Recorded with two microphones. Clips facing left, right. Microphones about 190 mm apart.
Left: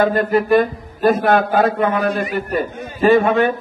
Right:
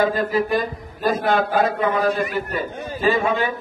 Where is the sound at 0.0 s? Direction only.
60° left (ahead or behind).